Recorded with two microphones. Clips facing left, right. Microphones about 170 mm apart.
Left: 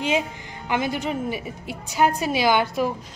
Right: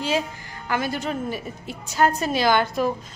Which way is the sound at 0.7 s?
15° left (ahead or behind).